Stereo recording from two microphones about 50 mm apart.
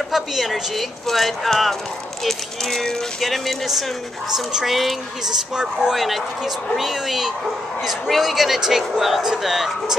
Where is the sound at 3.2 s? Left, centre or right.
Centre.